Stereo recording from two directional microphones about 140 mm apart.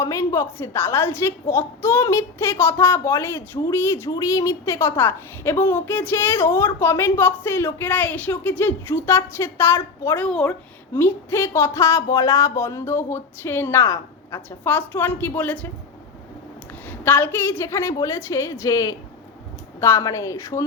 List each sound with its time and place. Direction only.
0.0 s speech: 20° left (ahead or behind)
10.2 s speech: 5° left (ahead or behind)
10.9 s speech: 15° left (ahead or behind)
17.0 s a woman's voice: 15° left (ahead or behind)